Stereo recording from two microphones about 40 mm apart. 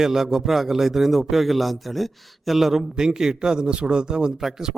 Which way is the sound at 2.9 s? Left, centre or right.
Centre.